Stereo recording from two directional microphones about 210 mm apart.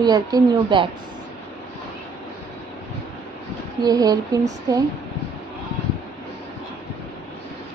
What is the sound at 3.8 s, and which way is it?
Speech, 20° right (ahead or behind).